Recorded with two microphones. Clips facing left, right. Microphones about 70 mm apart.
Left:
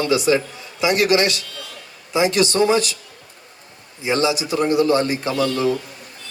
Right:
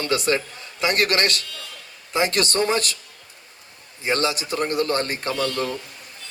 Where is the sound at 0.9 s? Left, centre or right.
Right.